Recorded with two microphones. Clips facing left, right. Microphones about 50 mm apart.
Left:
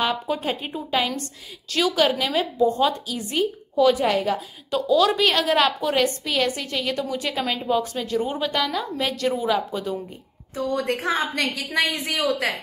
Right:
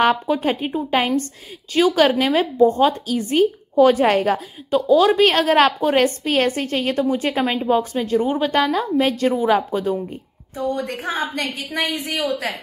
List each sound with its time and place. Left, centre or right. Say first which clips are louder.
0.0 s a woman's voice: right 7 dB; right
2.0 s a woman's voice: right 5 dB; right
4.6 s a woman's voice: right 4 dB; right
10.5 s a woman's voice: right 1 dB; left